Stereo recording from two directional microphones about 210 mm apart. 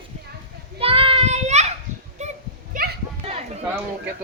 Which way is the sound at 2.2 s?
35° right (ahead or behind).